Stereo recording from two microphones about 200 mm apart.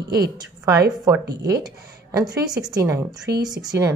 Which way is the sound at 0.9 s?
Centre (ahead or behind).